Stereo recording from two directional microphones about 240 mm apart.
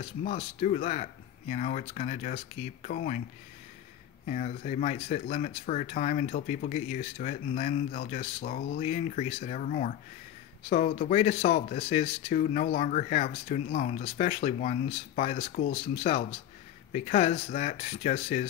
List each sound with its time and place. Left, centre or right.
0.0 s speech: left
4.3 s speech: left